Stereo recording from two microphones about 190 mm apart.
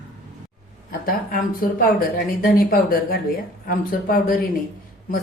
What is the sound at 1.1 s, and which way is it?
Speech, 50° left (ahead or behind).